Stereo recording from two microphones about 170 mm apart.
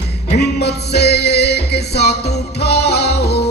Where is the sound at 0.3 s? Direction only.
75° left (ahead or behind).